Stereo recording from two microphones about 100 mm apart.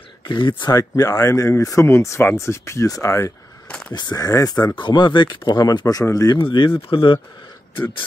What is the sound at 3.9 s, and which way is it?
Speech, 45° left (ahead or behind).